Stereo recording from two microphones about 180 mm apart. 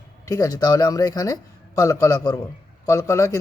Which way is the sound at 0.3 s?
20° left (ahead or behind).